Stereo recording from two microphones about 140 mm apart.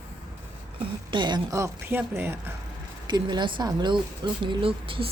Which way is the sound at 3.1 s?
30° right (ahead or behind).